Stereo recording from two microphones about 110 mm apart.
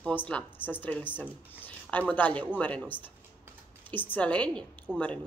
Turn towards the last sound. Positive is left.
turn(degrees=10)  # may be behind; listen again after turning